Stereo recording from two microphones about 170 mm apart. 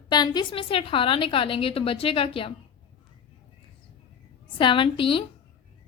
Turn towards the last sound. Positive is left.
turn(degrees=30)  # may be behind; listen again after turning